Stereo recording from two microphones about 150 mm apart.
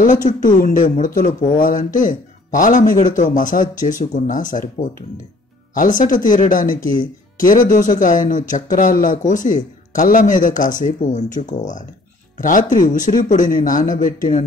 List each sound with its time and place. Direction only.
0.0 s speech: 60° left (ahead or behind)